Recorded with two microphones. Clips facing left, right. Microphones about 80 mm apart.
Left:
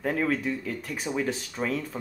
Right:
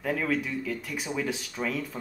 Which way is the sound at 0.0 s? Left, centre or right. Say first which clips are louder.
Left 2 dB; left.